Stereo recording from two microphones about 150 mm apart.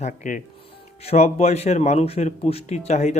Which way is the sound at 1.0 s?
45° left (ahead or behind).